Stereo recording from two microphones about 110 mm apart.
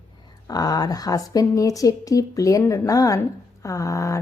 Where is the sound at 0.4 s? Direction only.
35° left (ahead or behind).